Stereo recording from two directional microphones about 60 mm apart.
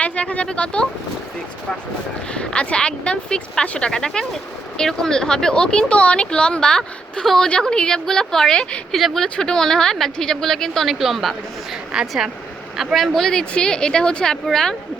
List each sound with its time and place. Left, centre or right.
0.0 s speech: left
2.3 s a man's voice: centre